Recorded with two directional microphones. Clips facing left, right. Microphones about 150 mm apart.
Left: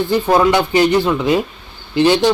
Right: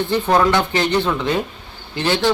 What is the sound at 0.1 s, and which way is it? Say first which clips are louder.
A man's voice: left 3 dB; 10° left (ahead or behind).